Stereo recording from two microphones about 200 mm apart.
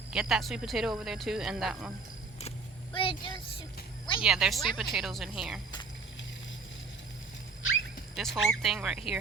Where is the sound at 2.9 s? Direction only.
25° left (ahead or behind).